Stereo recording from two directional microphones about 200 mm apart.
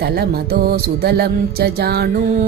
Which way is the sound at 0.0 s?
50° right (ahead or behind).